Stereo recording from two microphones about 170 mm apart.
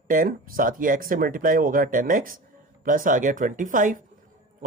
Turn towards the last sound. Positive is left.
turn(degrees=-50)  # may be behind; listen again after turning